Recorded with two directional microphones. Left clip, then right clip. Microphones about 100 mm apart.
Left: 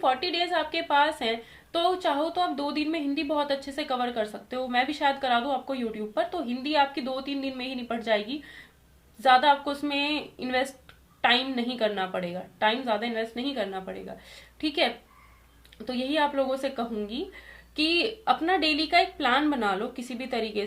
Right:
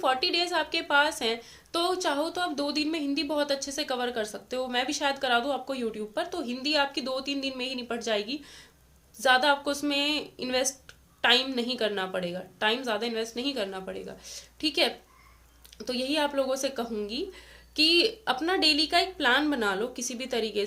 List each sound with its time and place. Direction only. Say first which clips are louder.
0.0 s a woman's voice: even; 30° right (ahead or behind)